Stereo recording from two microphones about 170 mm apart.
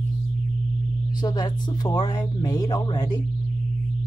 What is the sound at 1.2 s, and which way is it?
Speech, 25° left (ahead or behind).